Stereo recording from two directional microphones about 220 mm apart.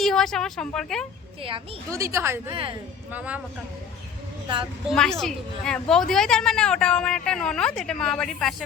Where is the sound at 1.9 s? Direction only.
15° right (ahead or behind).